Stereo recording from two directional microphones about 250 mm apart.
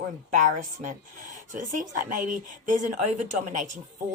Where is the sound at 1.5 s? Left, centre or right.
Right.